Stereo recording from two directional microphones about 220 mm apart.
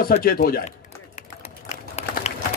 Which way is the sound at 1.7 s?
30° left (ahead or behind).